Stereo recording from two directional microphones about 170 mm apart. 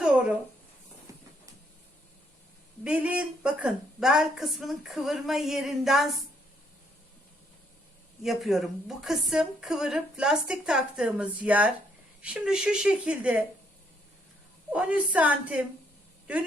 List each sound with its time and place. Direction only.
2.8 s speech: 5° right (ahead or behind)
8.2 s speech: centre (ahead or behind)
14.7 s a woman's voice: 10° right (ahead or behind)